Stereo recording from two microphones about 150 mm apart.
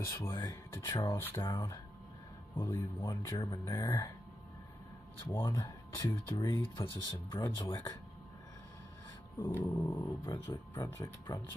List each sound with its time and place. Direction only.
0.0 s speech: 20° left (ahead or behind)
0.7 s speech: 30° left (ahead or behind)
1.1 s speech: 15° left (ahead or behind)
5.3 s speech: 25° left (ahead or behind)
6.6 s speech: 35° left (ahead or behind)
9.4 s speech: 20° left (ahead or behind)